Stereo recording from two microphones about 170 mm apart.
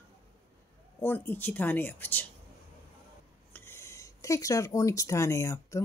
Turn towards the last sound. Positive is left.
turn(degrees=15)  # may be behind; listen again after turning